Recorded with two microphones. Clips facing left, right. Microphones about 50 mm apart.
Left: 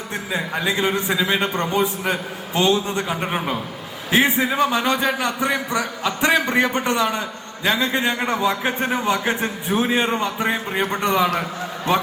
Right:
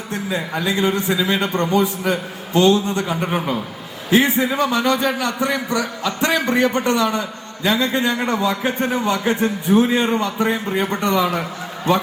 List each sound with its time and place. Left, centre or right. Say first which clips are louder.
0.3 s a man's voice: even; left